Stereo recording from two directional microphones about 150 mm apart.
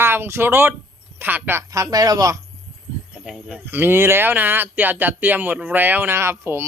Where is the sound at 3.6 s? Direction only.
15° right (ahead or behind).